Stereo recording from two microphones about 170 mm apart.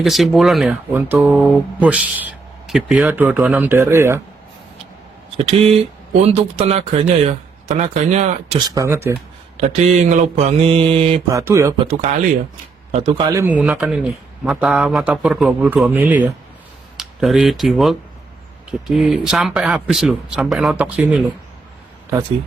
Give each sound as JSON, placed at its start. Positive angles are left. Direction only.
{"t": 0.0, "sound": "speech", "side_deg": 0}
{"t": 5.5, "sound": "speech", "side_deg": -35}
{"t": 8.5, "sound": "speech", "side_deg": -20}
{"t": 9.6, "sound": "speech", "side_deg": -45}
{"t": 11.3, "sound": "speech", "side_deg": -20}
{"t": 11.9, "sound": "speech", "side_deg": -40}
{"t": 13.1, "sound": "speech", "side_deg": -25}
{"t": 13.4, "sound": "speech", "side_deg": -10}